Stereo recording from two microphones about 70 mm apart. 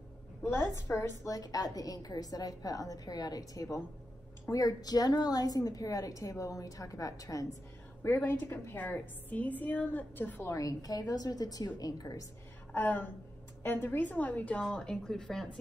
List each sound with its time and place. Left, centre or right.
0.5 s a woman's voice: left
1.2 s a woman's voice: left
8.0 s a woman's voice: left
10.4 s a woman's voice: left
12.7 s a woman's voice: left; by 15.4 s centre